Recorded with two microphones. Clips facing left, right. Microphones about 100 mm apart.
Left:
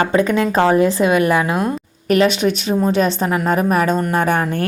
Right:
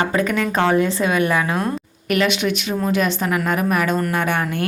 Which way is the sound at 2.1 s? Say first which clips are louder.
Left 4 dB; 35° left (ahead or behind).